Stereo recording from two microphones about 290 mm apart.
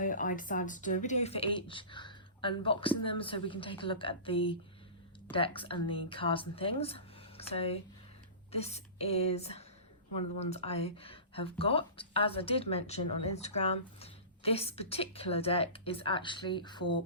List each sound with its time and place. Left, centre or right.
0.0 s speech: left